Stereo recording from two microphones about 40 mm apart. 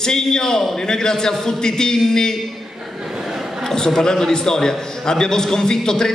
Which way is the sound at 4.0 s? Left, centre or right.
Centre.